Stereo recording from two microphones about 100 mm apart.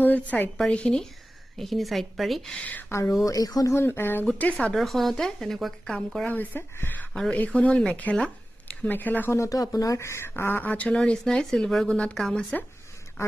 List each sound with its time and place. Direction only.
0.0 s speech: 15° left (ahead or behind); by 2.5 s centre (ahead or behind)
2.5 s speech: 15° left (ahead or behind)
2.9 s a woman's voice: 30° left (ahead or behind)
3.7 s speech: 25° left (ahead or behind)
4.3 s speech: 10° left (ahead or behind)
4.7 s speech: centre (ahead or behind)
6.2 s speech: 15° left (ahead or behind)